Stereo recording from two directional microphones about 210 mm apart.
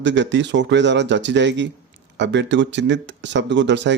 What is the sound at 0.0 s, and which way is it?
Speech, 60° right (ahead or behind).